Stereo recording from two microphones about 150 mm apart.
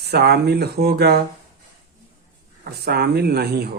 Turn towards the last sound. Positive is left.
turn(degrees=-90)